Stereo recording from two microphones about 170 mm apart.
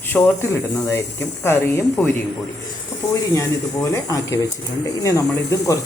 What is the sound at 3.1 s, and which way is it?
A man's voice, 20° left (ahead or behind).